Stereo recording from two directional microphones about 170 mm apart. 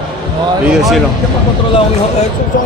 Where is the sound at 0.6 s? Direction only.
Centre (ahead or behind).